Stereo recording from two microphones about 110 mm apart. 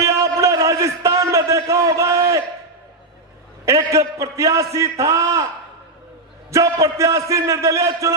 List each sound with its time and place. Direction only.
0.0 s a sound: 30° right (ahead or behind)
3.7 s a man's voice: 30° right (ahead or behind)
6.5 s a man's voice: 30° right (ahead or behind)